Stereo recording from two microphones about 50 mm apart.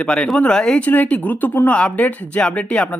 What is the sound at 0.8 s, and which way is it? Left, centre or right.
Speech, left.